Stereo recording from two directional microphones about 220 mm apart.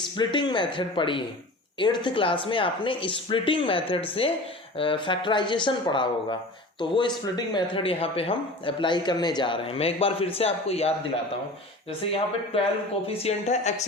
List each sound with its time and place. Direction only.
0.0 s speech: 20° left (ahead or behind)
13.2 s speech: 30° left (ahead or behind)